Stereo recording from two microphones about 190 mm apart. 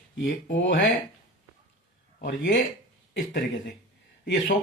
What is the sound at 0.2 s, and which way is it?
Speech, 70° left (ahead or behind).